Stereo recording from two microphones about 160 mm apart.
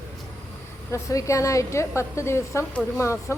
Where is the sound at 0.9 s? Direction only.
20° left (ahead or behind).